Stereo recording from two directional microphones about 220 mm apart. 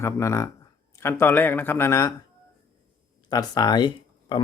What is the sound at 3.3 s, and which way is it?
Speech, 15° left (ahead or behind).